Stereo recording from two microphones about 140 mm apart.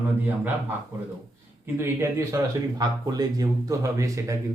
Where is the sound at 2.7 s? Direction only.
30° right (ahead or behind).